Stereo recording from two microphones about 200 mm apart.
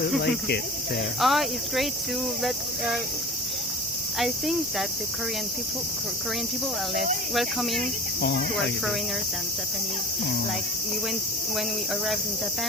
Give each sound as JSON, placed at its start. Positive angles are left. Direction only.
{"t": 0.2, "sound": "speech", "side_deg": 55}
{"t": 1.2, "sound": "cricket", "side_deg": 0}
{"t": 4.2, "sound": "cricket", "side_deg": 0}
{"t": 7.3, "sound": "cricket", "side_deg": 0}
{"t": 8.2, "sound": "cricket", "side_deg": 55}